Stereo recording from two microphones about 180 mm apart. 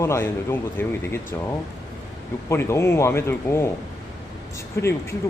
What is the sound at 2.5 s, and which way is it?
A man's voice, 15° left (ahead or behind).